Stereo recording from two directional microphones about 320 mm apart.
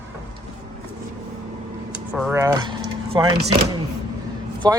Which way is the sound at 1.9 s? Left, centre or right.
Centre.